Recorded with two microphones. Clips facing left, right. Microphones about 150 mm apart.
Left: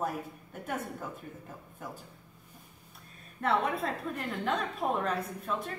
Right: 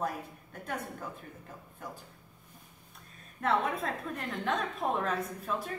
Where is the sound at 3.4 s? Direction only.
Centre (ahead or behind).